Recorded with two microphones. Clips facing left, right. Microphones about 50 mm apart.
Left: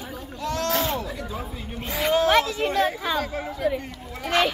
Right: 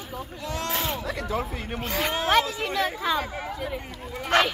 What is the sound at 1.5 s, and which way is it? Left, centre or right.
Speech, right.